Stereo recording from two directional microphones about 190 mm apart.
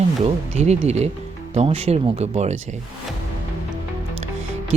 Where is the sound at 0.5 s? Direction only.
35° right (ahead or behind).